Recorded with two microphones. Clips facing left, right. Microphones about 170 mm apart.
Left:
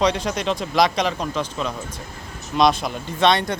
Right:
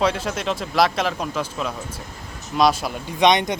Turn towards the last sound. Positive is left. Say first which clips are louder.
# right 1 dB
turn(degrees=-20)  # may be behind; listen again after turning